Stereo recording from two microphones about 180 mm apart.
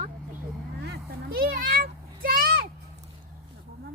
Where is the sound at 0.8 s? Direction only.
65° right (ahead or behind).